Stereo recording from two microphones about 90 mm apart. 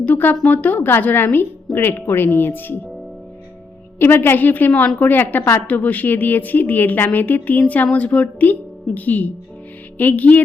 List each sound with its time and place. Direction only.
0.0 s a woman's voice: 20° left (ahead or behind)
3.9 s a woman's voice: 25° left (ahead or behind)